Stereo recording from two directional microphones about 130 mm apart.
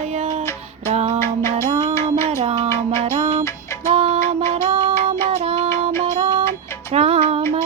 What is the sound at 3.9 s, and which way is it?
Music, 45° right (ahead or behind).